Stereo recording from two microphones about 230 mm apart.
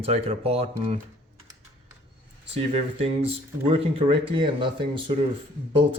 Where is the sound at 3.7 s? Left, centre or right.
Right.